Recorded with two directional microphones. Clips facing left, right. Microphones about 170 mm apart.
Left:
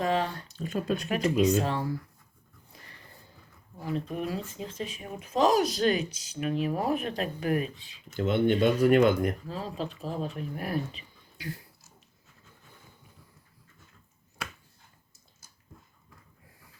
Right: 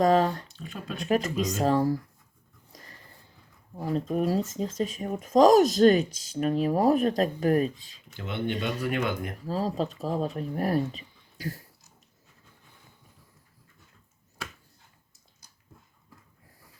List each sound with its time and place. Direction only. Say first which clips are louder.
0.0 s speech: right 6 dB; 40° right (ahead or behind)
0.4 s speech: left 8 dB; 40° left (ahead or behind)
1.0 s speech: even; 40° right (ahead or behind)
2.7 s a sound: right 3 dB; 40° right (ahead or behind)
3.8 s speech: right 5 dB; 40° right (ahead or behind)
8.1 s speech: left 7 dB; 45° left (ahead or behind)
9.5 s speech: right 6 dB; 40° right (ahead or behind)